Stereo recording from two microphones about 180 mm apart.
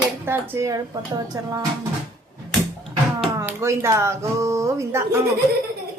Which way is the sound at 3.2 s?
10° right (ahead or behind).